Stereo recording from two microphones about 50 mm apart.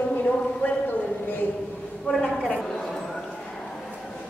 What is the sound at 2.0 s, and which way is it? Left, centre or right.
Speech, centre.